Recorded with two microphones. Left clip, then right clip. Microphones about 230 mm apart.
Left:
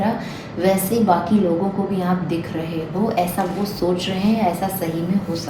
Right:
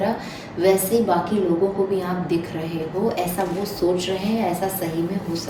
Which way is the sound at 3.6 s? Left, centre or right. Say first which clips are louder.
Even; left.